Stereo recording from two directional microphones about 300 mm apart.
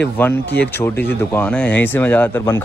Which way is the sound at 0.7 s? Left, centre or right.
Centre.